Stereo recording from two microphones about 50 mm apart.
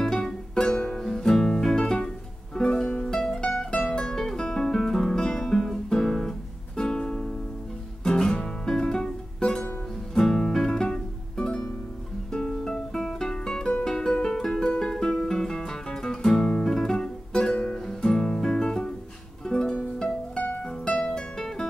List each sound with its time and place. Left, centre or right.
0.0 s music: centre
14.2 s guitar: centre
19.4 s music: centre
20.8 s music: left